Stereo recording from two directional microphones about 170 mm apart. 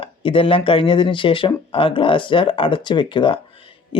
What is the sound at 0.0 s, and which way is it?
Speech, 30° left (ahead or behind).